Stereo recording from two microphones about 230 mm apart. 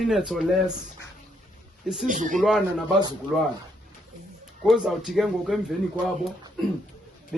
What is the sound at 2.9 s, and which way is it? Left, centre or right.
Speech, centre.